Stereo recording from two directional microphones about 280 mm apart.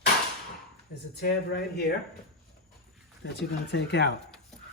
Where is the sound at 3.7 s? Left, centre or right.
Left.